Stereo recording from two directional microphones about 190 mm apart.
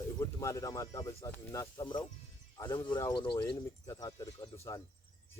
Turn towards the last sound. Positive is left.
turn(degrees=20)  # may be behind; listen again after turning